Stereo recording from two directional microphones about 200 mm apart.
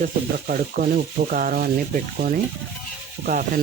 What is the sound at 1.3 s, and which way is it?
Speech, 45° right (ahead or behind).